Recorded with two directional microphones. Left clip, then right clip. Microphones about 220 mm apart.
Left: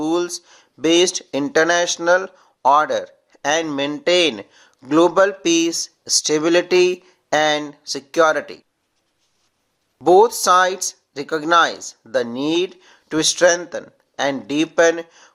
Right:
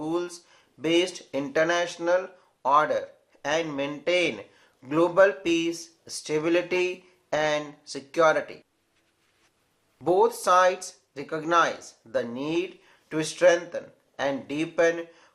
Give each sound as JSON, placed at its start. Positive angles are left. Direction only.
{"t": 0.0, "sound": "speech", "side_deg": 40}
{"t": 10.0, "sound": "speech", "side_deg": 40}